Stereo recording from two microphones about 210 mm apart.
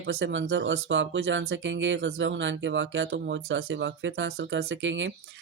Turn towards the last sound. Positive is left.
turn(degrees=-65)  # may be behind; listen again after turning